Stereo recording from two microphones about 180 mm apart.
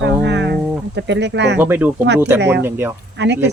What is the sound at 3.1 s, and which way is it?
Speech, 80° right.